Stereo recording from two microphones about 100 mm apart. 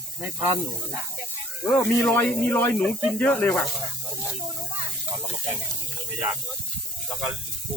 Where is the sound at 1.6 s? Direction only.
20° left (ahead or behind).